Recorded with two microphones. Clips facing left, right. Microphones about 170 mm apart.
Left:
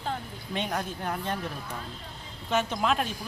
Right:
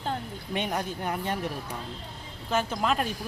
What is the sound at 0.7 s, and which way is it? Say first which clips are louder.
Speech: right 1 dB; 10° right (ahead or behind).